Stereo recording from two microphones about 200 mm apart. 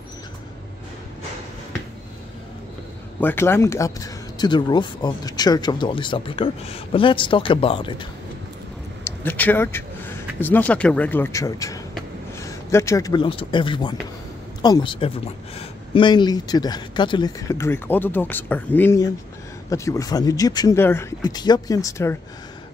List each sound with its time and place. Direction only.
3.2 s speech: 10° left (ahead or behind)
9.0 s a man's voice: 10° left (ahead or behind)